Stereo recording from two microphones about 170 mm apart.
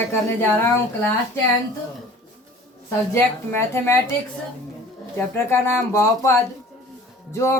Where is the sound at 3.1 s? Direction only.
15° left (ahead or behind).